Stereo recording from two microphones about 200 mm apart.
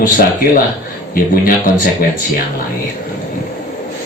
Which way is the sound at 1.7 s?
45° left (ahead or behind).